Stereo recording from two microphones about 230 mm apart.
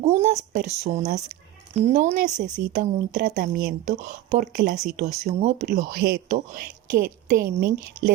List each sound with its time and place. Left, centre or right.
0.0 s speech: right